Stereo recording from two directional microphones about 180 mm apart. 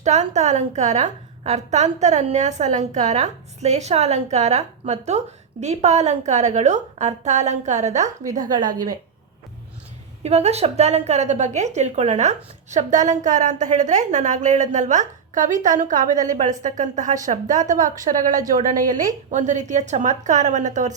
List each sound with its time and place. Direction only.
0.0 s a woman's voice: 40° right (ahead or behind)
10.2 s a woman's voice: 35° right (ahead or behind)